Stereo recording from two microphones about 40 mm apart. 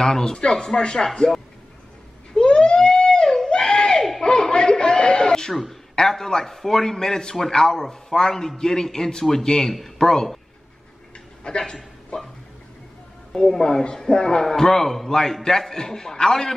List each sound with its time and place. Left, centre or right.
0.0 s a man's voice: centre
2.3 s a sound: left
4.2 s laughter: centre
5.5 s a man's voice: centre
11.4 s speech: centre
13.3 s a man's voice: centre
14.4 s a man's voice: centre